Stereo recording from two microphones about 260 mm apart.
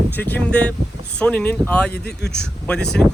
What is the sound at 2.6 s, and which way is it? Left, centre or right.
Speech, centre.